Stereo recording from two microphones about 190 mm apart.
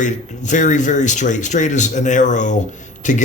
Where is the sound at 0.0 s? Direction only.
40° left (ahead or behind).